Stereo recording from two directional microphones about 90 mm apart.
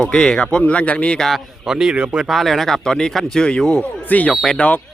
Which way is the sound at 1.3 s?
5° right (ahead or behind).